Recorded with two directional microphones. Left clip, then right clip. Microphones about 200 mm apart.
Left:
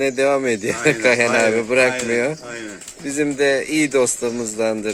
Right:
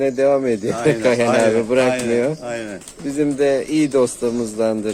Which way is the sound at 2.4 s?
55° right (ahead or behind).